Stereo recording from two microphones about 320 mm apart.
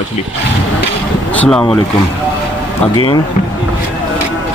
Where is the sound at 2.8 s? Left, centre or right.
Centre.